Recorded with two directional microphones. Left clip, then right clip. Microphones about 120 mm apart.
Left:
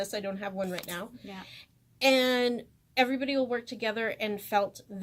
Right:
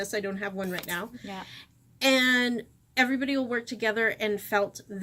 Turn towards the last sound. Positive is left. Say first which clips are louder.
# right 1 dB
turn(degrees=20)  # may be behind; listen again after turning